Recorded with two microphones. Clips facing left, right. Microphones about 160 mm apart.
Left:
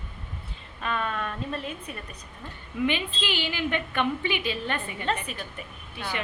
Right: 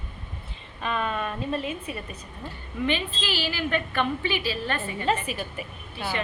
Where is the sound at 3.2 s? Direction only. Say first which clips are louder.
Left 1 dB; 20° left (ahead or behind).